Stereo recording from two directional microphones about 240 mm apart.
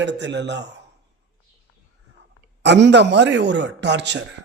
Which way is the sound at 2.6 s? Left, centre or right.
Right.